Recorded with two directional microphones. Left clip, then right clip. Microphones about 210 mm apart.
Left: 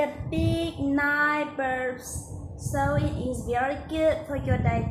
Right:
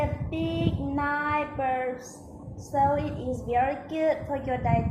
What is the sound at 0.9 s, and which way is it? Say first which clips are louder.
Child singing: left 3 dB; 20° left (ahead or behind).